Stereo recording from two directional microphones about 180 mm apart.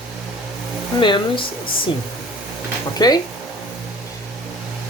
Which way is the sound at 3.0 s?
20° left (ahead or behind).